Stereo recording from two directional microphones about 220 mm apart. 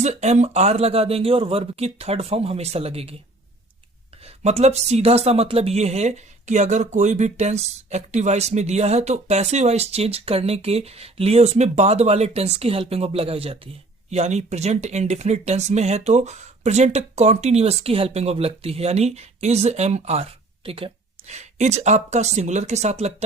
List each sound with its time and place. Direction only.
0.0 s speech: 30° right (ahead or behind)
4.4 s speech: 30° right (ahead or behind)